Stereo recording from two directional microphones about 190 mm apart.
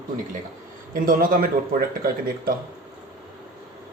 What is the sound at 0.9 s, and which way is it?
Speech, 50° right (ahead or behind).